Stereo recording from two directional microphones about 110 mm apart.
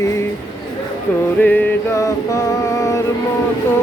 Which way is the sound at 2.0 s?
30° left (ahead or behind).